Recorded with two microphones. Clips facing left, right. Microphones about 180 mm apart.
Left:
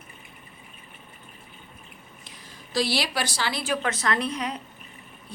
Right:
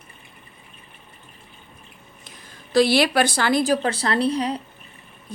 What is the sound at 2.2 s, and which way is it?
A woman's voice, 55° right (ahead or behind).